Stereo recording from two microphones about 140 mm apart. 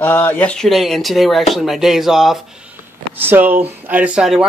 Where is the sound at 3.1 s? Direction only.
15° right (ahead or behind).